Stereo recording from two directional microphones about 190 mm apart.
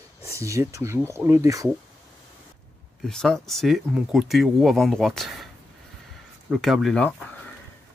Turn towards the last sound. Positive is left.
turn(degrees=5)  # may be behind; listen again after turning